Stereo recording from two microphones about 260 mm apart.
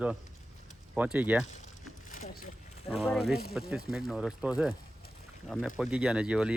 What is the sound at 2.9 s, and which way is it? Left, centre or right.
Speech, centre.